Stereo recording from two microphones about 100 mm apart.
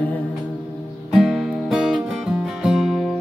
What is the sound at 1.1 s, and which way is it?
Music, 5° right (ahead or behind).